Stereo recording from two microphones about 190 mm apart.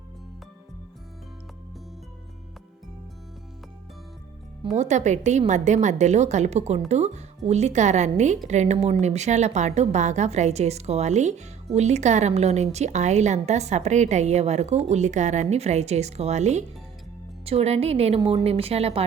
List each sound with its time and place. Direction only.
4.6 s a woman's voice: 35° right (ahead or behind)